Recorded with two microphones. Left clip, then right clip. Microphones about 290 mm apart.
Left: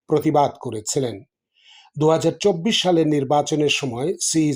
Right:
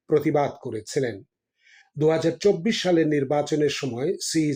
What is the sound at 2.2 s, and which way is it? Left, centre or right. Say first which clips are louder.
Speech: left 2 dB; centre.